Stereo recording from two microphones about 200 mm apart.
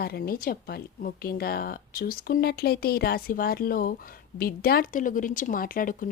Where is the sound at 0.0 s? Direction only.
50° left (ahead or behind).